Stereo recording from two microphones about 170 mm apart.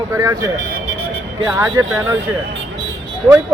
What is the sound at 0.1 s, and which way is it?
Speech, 20° right (ahead or behind).